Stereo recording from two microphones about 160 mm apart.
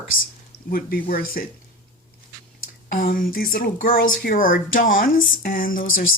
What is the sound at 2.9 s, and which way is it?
Speech, 65° left (ahead or behind).